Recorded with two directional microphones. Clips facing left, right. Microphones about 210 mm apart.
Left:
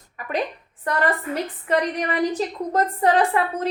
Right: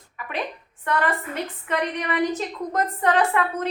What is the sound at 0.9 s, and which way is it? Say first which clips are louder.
A woman's voice: left 2 dB; 35° left (ahead or behind).